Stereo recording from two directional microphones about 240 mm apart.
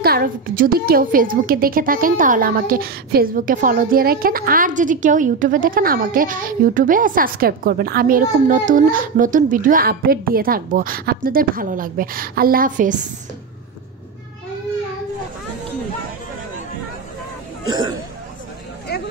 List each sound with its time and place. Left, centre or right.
0.0 s a woman's voice: right
17.6 s throat clearing: centre